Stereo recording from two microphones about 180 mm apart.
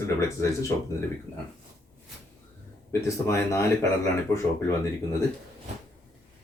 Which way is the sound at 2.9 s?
15° left (ahead or behind).